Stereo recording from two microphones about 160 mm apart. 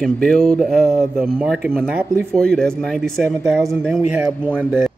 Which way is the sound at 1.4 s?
10° right (ahead or behind).